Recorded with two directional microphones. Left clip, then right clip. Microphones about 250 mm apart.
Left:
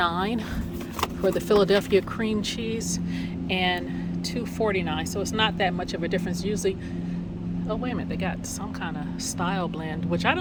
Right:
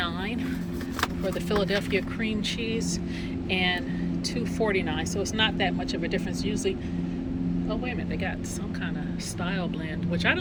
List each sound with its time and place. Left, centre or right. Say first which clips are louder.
0.0 s vehicle: left 6 dB; left
1.2 s speech: left 10 dB; left
3.5 s speech: left 1 dB; centre
9.4 s speech: left 4 dB; centre